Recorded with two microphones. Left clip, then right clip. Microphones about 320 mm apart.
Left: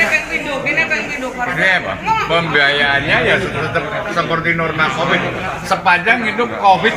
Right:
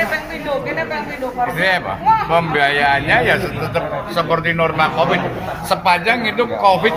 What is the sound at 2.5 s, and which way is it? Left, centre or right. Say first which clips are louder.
Speech: left 3 dB; centre.